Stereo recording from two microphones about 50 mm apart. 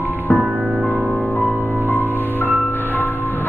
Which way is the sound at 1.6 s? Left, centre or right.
Left.